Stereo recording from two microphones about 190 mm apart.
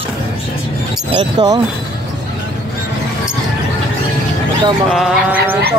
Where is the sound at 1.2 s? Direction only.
20° right (ahead or behind).